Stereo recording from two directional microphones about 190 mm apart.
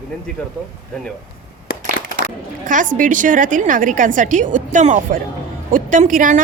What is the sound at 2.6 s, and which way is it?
A woman's voice, 45° right (ahead or behind).